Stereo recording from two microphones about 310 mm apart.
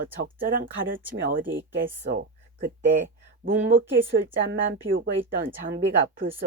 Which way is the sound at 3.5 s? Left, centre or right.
Right.